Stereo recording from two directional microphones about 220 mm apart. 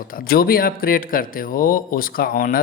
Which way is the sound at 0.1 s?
40° left (ahead or behind).